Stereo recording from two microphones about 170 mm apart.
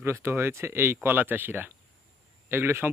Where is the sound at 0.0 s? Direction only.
15° right (ahead or behind).